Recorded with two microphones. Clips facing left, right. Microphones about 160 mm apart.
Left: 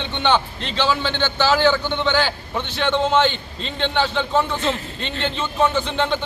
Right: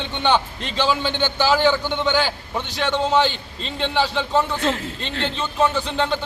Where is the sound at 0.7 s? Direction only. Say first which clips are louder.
Even; 10° right (ahead or behind).